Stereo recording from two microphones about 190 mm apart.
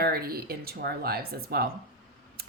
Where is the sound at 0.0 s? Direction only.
55° right (ahead or behind).